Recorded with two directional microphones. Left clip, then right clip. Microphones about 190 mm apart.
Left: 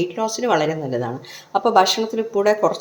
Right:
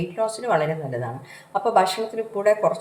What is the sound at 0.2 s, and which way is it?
A woman's voice, 35° left (ahead or behind).